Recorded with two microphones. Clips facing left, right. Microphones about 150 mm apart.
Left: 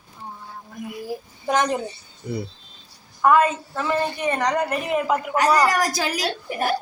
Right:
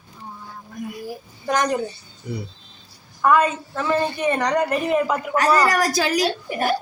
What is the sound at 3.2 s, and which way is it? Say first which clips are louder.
A child's voice: even; 10° left (ahead or behind).